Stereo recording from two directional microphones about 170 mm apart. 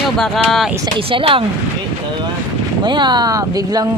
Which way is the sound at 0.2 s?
Centre (ahead or behind).